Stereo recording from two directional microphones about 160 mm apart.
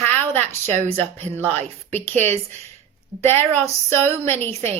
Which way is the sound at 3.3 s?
10° left (ahead or behind).